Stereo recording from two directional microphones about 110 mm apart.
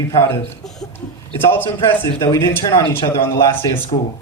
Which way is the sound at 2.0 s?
30° left (ahead or behind).